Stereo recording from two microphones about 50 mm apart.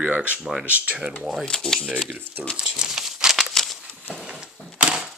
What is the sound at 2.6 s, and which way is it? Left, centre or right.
Crumpling, centre.